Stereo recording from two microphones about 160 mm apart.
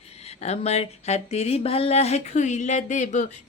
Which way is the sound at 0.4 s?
40° left (ahead or behind).